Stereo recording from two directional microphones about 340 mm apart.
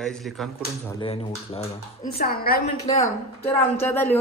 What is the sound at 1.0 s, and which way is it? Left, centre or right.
A woman's voice, centre.